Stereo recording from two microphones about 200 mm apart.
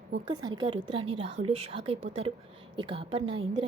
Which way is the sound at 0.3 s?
25° right (ahead or behind).